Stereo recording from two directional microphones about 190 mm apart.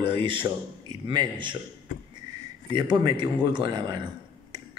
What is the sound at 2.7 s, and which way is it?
Speech, 25° right (ahead or behind).